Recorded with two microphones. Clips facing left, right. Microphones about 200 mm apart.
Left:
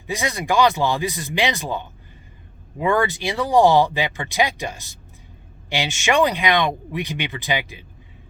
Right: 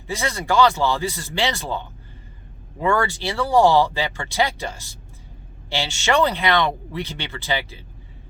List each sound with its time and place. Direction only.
0.1 s speech: 15° left (ahead or behind)